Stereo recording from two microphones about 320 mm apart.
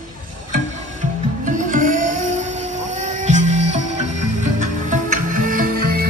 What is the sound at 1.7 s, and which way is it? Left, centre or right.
Music, right.